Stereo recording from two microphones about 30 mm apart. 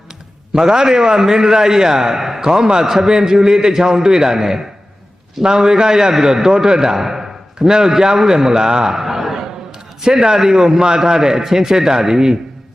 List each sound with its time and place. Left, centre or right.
0.5 s a man's voice: right
8.9 s a sound: centre
10.0 s a man's voice: right